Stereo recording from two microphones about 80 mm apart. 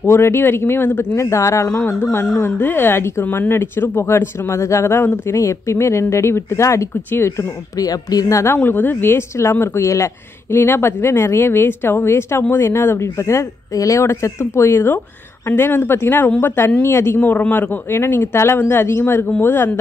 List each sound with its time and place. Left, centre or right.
0.0 s speech: left
7.8 s speech: left
8.6 s speech: left